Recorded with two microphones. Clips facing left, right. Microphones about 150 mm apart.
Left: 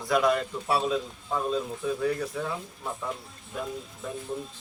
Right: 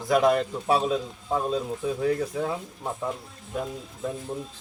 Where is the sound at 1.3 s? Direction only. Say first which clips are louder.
Right 2 dB; 25° right (ahead or behind).